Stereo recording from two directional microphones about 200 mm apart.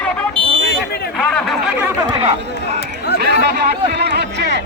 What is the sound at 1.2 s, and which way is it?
Chatter, 5° left (ahead or behind).